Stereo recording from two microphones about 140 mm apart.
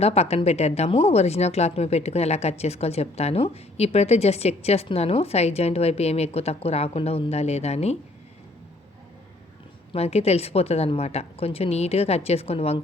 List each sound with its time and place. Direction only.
0.0 s speech: 45° left (ahead or behind)
9.9 s speech: 50° left (ahead or behind)